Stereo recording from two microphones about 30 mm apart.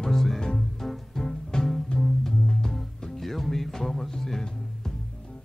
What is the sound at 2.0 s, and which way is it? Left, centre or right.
Music, centre.